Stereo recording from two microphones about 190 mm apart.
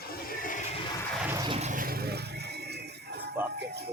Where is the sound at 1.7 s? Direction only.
50° right (ahead or behind).